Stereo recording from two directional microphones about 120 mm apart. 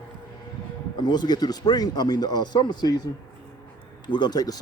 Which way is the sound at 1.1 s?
35° left (ahead or behind).